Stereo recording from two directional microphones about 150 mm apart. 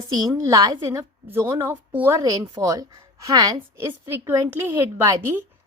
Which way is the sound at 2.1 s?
25° right (ahead or behind).